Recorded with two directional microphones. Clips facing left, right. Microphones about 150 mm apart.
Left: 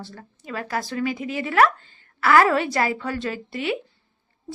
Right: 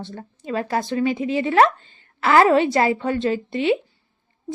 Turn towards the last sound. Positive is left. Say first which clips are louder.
# right 7 dB
turn(degrees=-25)  # may be behind; listen again after turning